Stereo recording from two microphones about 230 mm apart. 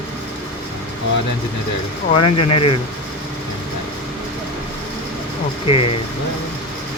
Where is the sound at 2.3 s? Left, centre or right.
Left.